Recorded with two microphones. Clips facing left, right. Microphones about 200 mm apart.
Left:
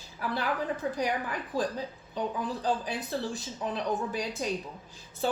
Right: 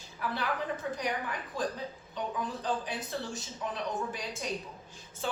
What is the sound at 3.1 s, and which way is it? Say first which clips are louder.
Speech: left 5 dB; 35° left (ahead or behind).